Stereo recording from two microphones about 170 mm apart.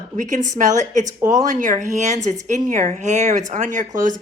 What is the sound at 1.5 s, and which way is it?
Speech, 50° right (ahead or behind).